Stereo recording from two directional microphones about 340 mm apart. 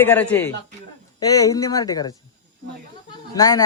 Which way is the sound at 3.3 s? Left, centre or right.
Centre.